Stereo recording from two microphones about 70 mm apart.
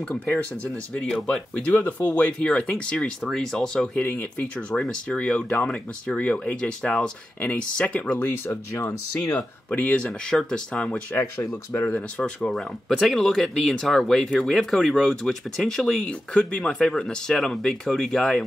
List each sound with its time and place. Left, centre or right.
0.1 s speech: centre
1.5 s speech: left
9.7 s speech: centre
11.4 s speech: left
12.2 s speech: centre